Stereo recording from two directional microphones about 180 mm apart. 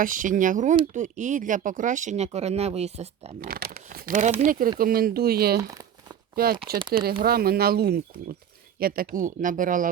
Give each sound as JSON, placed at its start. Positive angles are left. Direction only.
{"t": 0.0, "sound": "speech", "side_deg": -45}
{"t": 3.4, "sound": "speech", "side_deg": -55}
{"t": 5.5, "sound": "crumpling", "side_deg": -20}
{"t": 6.3, "sound": "speech", "side_deg": -55}